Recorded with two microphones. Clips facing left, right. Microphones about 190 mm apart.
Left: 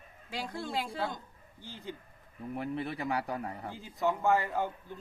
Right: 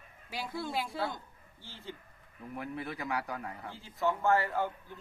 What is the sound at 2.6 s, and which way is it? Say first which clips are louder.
A man's voice: left 3 dB; 30° left (ahead or behind).